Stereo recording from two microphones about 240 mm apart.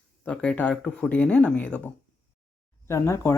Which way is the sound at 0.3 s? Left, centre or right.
Centre.